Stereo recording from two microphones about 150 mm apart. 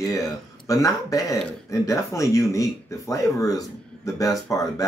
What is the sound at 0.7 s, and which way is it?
Speech, 25° left (ahead or behind).